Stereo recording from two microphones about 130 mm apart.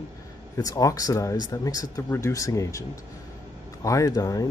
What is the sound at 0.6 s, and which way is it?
Speech, 30° left (ahead or behind).